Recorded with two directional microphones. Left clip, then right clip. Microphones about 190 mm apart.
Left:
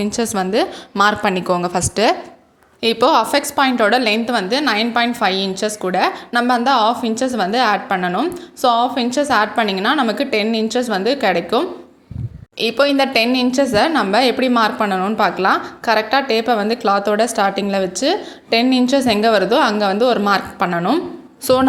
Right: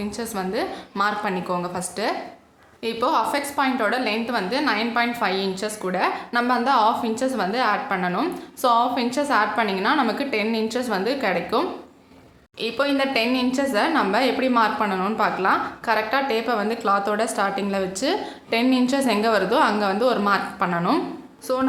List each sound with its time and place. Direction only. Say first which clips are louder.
0.0 s a woman's voice: left 9 dB; 35° left (ahead or behind)
21.4 s a woman's voice: left 9 dB; 40° left (ahead or behind)